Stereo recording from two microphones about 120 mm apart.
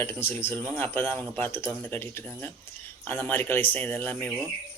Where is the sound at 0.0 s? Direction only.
15° left (ahead or behind).